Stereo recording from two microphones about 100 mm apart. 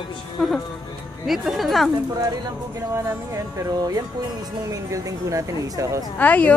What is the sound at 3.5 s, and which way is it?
Speech, 40° right (ahead or behind).